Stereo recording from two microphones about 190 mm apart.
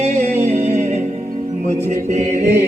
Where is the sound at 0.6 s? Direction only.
40° right (ahead or behind).